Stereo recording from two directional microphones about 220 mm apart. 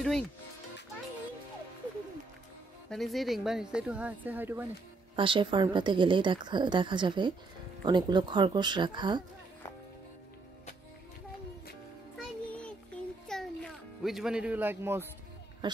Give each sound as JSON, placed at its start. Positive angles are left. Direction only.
{"t": 2.9, "sound": "speech", "side_deg": 0}
{"t": 5.1, "sound": "a woman's voice", "side_deg": -20}
{"t": 12.5, "sound": "music", "side_deg": 5}
{"t": 15.6, "sound": "a woman's voice", "side_deg": -20}